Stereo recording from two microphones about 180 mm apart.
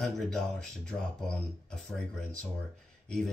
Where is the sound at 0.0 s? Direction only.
Centre (ahead or behind).